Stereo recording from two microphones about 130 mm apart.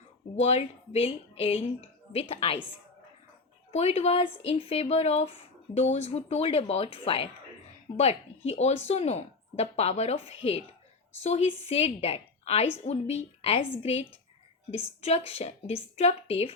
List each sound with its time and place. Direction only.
0.3 s speech: 55° left (ahead or behind)
3.7 s speech: 55° left (ahead or behind)
7.9 s speech: 55° left (ahead or behind)